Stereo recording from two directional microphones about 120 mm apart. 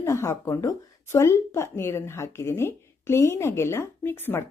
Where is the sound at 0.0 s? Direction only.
25° left (ahead or behind).